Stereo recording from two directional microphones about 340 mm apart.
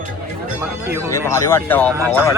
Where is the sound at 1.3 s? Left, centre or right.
Centre.